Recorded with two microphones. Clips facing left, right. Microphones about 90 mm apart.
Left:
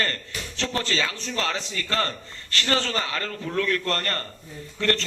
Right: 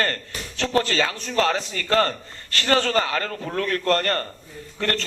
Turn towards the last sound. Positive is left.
turn(degrees=-40)  # may be behind; listen again after turning